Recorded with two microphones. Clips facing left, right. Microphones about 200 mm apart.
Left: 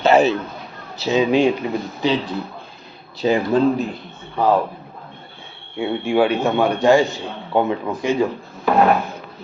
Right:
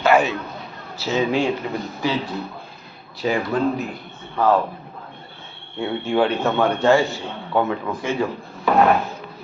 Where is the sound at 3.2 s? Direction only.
25° left (ahead or behind).